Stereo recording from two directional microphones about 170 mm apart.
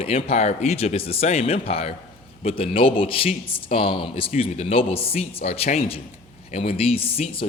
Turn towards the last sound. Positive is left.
turn(degrees=35)  # may be behind; listen again after turning